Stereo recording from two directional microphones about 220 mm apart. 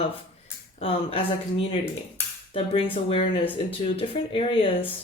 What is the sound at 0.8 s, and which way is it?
Speech, 25° left (ahead or behind).